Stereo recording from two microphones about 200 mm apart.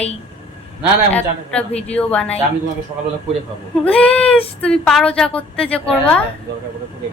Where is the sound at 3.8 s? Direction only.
5° left (ahead or behind).